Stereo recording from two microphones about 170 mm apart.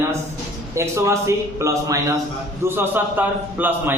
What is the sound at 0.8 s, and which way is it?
A man's voice, 15° right (ahead or behind).